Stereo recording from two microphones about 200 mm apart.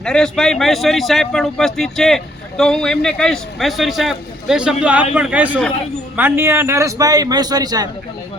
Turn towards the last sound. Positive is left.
turn(degrees=-20)  # may be behind; listen again after turning